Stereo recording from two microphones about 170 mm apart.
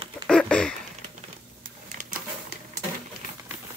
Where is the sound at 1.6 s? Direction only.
50° right (ahead or behind).